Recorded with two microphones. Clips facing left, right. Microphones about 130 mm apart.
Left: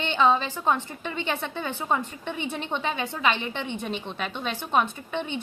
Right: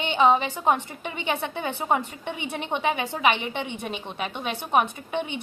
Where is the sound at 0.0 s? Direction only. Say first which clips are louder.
Right 2 dB; 15° right (ahead or behind).